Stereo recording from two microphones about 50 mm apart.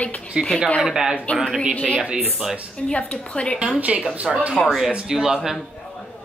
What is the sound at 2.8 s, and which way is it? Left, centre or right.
Speech, centre.